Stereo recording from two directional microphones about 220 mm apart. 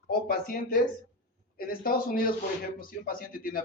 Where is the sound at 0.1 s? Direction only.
40° left (ahead or behind).